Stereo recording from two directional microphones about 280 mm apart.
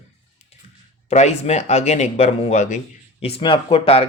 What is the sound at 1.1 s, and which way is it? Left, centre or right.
Speech, left.